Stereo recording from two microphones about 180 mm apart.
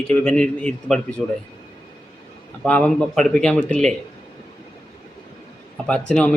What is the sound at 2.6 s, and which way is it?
Speech, 5° left (ahead or behind).